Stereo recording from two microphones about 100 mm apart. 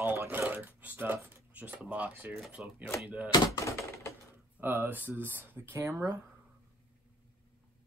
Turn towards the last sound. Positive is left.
turn(degrees=-30)  # may be behind; listen again after turning